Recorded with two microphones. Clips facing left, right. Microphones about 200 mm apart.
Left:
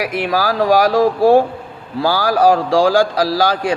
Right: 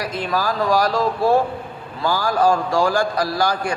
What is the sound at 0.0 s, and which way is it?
A man's voice, 70° left (ahead or behind).